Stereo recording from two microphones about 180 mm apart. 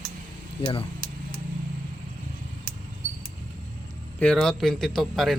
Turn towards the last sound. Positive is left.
turn(degrees=0)  # may be behind; listen again after turning